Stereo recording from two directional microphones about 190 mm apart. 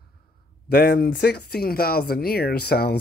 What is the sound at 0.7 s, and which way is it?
Speech, 55° left (ahead or behind).